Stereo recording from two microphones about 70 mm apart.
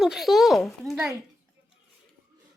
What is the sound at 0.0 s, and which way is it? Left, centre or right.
Speech, centre.